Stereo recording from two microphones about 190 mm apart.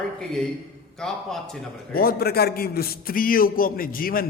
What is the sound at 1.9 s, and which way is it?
A man's voice, 50° left (ahead or behind).